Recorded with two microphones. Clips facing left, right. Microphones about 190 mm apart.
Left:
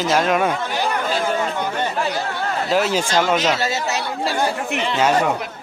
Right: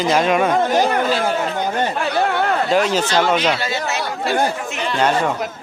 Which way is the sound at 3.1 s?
40° left (ahead or behind).